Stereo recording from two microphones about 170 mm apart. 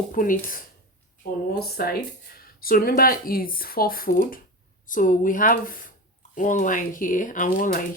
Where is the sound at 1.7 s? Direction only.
65° left (ahead or behind).